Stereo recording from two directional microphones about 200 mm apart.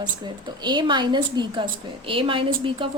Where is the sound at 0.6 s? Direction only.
25° right (ahead or behind).